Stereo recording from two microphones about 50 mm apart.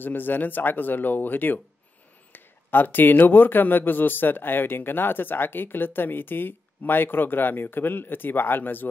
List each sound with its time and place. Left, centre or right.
0.0 s a man's voice: left